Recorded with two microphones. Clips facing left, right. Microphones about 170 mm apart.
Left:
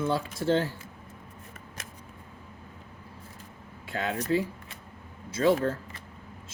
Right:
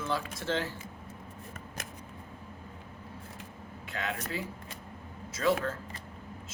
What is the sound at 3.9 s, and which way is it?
Speech, 35° left (ahead or behind).